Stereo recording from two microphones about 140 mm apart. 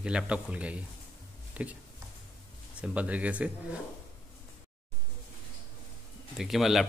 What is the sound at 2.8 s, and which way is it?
Speech, 10° right (ahead or behind).